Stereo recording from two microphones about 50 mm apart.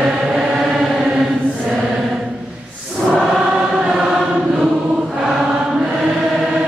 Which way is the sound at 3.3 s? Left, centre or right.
Centre.